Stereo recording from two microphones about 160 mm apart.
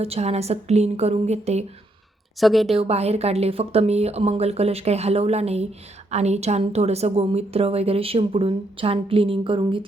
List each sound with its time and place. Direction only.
0.0 s speech: 40° right (ahead or behind)
2.4 s a woman's voice: centre (ahead or behind)
2.7 s speech: 40° right (ahead or behind)